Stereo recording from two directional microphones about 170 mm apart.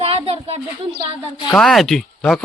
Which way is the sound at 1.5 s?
5° left (ahead or behind).